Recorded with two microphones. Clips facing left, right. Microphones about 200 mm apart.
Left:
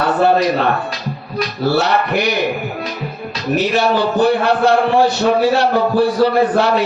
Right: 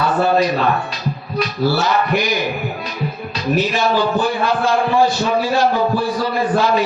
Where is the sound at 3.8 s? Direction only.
65° left (ahead or behind).